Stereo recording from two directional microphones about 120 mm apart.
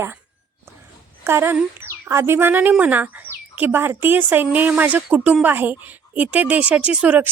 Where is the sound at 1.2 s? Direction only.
20° right (ahead or behind).